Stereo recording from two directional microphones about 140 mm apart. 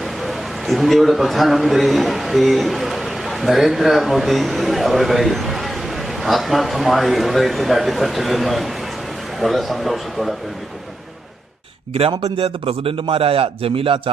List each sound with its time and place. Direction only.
0.0 s a man's voice: centre (ahead or behind)
11.9 s a man's voice: 45° right (ahead or behind)